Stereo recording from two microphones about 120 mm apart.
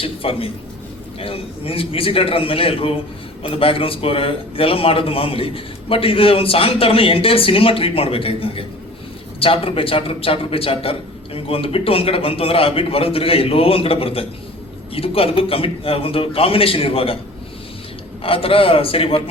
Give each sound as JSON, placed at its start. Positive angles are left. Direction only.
{"t": 0.0, "sound": "a man's voice", "side_deg": 50}
{"t": 18.2, "sound": "a man's voice", "side_deg": 50}